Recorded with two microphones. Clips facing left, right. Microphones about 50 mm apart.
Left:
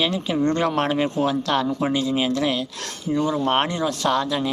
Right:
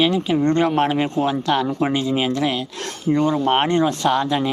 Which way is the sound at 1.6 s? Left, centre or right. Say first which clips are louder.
Right 2 dB; right.